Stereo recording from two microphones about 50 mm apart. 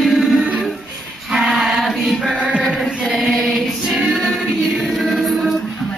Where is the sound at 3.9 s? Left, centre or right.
Centre.